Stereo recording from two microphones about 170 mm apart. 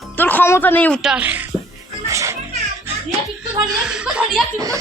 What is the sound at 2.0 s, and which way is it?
Speech, 15° right (ahead or behind).